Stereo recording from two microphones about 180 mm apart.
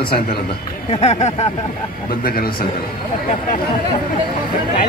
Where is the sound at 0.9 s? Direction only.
35° left (ahead or behind).